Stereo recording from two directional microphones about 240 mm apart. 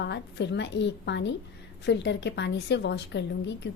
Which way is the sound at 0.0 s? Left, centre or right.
Left.